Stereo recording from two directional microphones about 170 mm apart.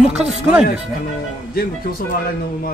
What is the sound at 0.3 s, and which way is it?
Speech, 5° right (ahead or behind).